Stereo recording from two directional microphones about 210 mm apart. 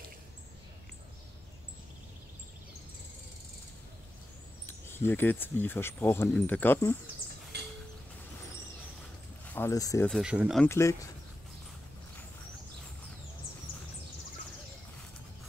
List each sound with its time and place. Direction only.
4.6 s speech: 10° left (ahead or behind)
7.5 s a sound: 50° right (ahead or behind)
9.5 s speech: 10° left (ahead or behind)
10.0 s speech: centre (ahead or behind)
10.6 s speech: 15° left (ahead or behind)